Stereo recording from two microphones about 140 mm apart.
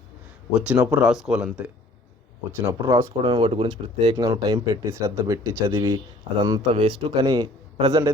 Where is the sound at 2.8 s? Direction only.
20° right (ahead or behind).